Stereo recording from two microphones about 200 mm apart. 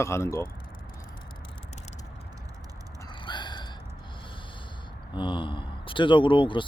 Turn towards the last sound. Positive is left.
turn(degrees=25)  # may be behind; listen again after turning